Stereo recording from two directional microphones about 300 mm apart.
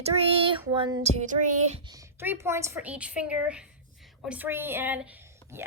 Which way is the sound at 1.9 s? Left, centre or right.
Centre.